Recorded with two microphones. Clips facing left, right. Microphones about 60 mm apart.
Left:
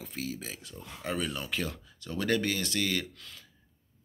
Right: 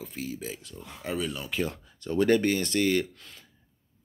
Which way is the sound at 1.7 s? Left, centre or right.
Right.